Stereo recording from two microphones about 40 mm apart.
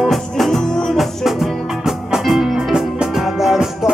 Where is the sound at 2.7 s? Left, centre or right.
Centre.